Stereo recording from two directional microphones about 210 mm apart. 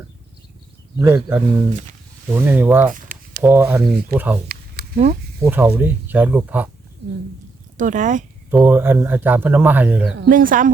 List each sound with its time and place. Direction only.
0.9 s a man's voice: 10° right (ahead or behind)
2.9 s a sound: 40° right (ahead or behind)
3.4 s a man's voice: 10° right (ahead or behind)
7.0 s speech: 55° right (ahead or behind)
7.8 s speech: 35° right (ahead or behind)
8.4 s a man's voice: 10° right (ahead or behind)
10.2 s speech: 40° right (ahead or behind)